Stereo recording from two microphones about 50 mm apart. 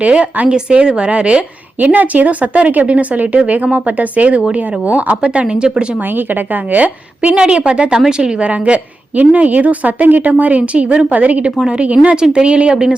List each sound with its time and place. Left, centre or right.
0.0 s speech: right
1.8 s speech: right; by 6.0 s centre
6.1 s speech: right; by 8.4 s centre
8.4 s speech: right